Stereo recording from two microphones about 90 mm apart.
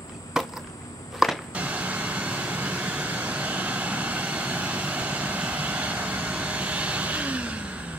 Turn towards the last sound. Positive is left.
turn(degrees=-15)  # may be behind; listen again after turning